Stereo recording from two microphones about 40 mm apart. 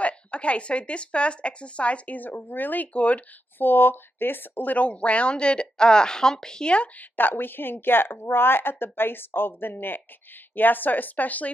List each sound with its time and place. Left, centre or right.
0.0 s speech: left
2.1 s speech: left
2.9 s speech: left
3.5 s speech: left; by 6.7 s centre
7.0 s speech: left
10.5 s speech: left